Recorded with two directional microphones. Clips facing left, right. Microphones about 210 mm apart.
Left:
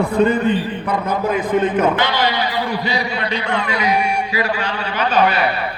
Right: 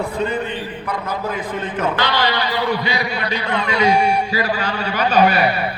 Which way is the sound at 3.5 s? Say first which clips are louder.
Right 4 dB; 25° right (ahead or behind).